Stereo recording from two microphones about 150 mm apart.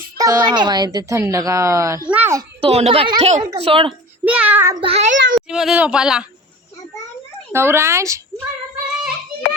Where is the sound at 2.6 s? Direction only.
40° right (ahead or behind).